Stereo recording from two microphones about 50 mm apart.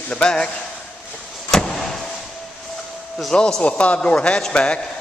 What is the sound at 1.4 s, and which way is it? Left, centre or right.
Vehicle, centre.